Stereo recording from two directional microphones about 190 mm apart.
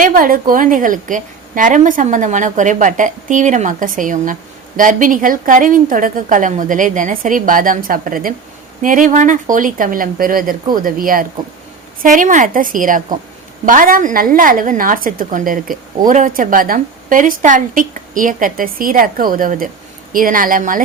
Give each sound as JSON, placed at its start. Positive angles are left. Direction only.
{"t": 0.0, "sound": "a woman's voice", "side_deg": -45}